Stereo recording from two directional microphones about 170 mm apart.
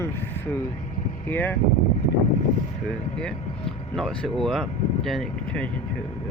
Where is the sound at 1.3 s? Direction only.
10° left (ahead or behind).